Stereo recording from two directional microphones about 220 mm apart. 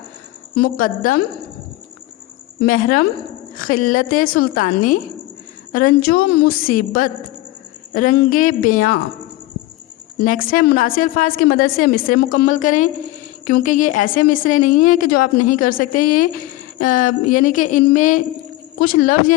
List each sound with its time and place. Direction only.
0.5 s a woman's voice: 40° left (ahead or behind)
2.6 s a woman's voice: 40° left (ahead or behind)
10.2 s a woman's voice: 40° left (ahead or behind)